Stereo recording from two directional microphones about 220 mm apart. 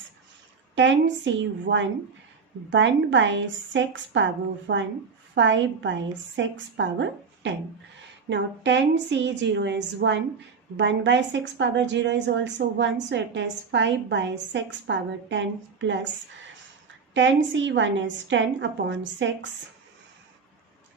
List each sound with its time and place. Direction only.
0.8 s a woman's voice: 55° right (ahead or behind)
17.2 s a woman's voice: 60° right (ahead or behind)